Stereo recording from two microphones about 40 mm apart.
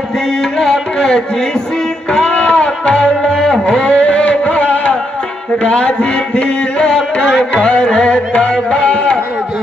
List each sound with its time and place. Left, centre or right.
0.4 s music: centre
2.1 s music: left
7.5 s music: left